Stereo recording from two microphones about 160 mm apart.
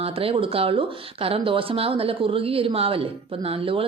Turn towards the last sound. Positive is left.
turn(degrees=-35)  # may be behind; listen again after turning